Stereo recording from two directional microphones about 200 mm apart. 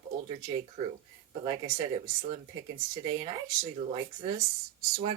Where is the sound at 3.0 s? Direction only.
25° right (ahead or behind).